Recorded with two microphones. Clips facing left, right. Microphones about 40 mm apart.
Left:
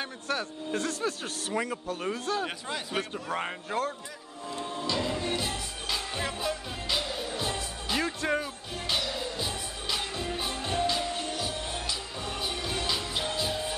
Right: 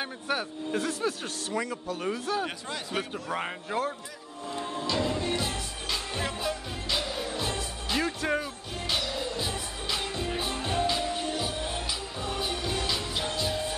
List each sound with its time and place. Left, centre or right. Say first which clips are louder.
0.0 s speech: right 1 dB; centre
0.7 s a man's voice: right 1 dB; centre
1.5 s speech: left 1 dB; left
2.0 s a man's voice: right 2 dB; centre
4.6 s music: right 2 dB; centre